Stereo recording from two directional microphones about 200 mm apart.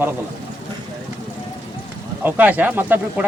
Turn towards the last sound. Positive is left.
turn(degrees=-10)  # may be behind; listen again after turning